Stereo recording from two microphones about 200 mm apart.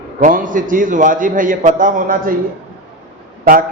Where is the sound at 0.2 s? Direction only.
40° right (ahead or behind).